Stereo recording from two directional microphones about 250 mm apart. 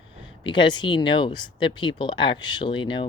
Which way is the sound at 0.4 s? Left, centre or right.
Centre.